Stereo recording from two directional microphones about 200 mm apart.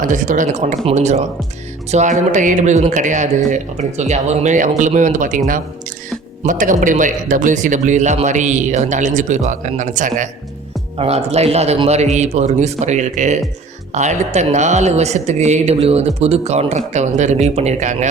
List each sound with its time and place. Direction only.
0.0 s speech: 40° right (ahead or behind)
6.4 s speech: 40° right (ahead or behind)